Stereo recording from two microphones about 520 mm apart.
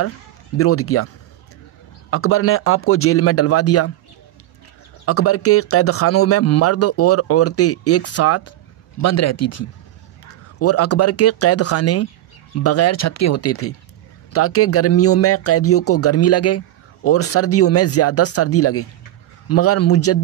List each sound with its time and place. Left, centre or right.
0.6 s speech: left
5.0 s speech: left